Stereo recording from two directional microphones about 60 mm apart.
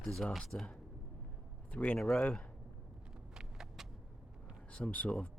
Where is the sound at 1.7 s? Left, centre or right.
Left.